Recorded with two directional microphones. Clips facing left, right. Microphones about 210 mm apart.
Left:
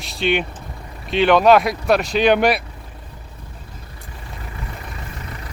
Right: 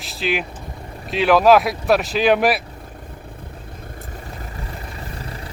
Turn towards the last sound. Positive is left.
turn(degrees=-30)  # may be behind; listen again after turning